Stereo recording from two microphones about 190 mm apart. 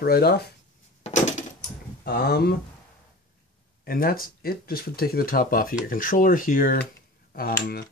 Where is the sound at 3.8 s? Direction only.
50° left (ahead or behind).